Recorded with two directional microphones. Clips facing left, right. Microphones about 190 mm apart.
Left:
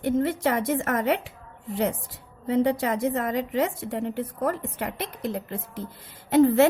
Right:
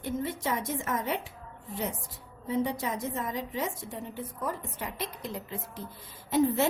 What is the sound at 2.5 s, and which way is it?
A woman's voice, 75° left (ahead or behind).